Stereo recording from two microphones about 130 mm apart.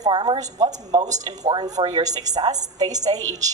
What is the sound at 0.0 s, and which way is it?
A woman's voice, 35° right (ahead or behind).